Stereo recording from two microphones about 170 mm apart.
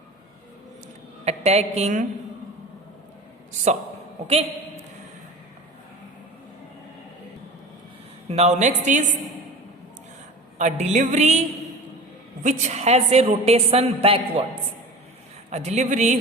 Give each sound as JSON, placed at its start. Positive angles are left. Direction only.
{"t": 1.2, "sound": "a woman's voice", "side_deg": -40}
{"t": 8.3, "sound": "a woman's voice", "side_deg": -40}
{"t": 10.6, "sound": "a woman's voice", "side_deg": -45}
{"t": 15.4, "sound": "a woman's voice", "side_deg": -40}